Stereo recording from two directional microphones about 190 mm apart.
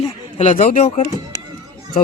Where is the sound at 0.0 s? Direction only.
35° left (ahead or behind).